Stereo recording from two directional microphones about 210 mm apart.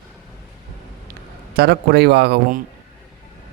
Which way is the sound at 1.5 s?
50° right (ahead or behind).